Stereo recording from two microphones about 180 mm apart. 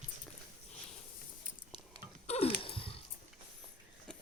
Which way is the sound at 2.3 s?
30° left (ahead or behind).